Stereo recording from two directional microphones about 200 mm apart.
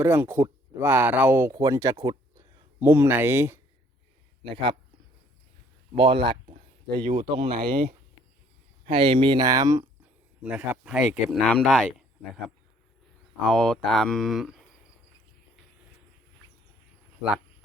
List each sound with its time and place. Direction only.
0.0 s speech: 10° right (ahead or behind)
5.9 s speech: 30° right (ahead or behind)
8.9 s speech: 25° right (ahead or behind)
10.4 s speech: 5° right (ahead or behind)
13.4 s speech: 5° left (ahead or behind)